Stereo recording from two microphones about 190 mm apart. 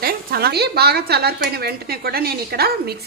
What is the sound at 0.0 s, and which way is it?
Speech, 55° right (ahead or behind).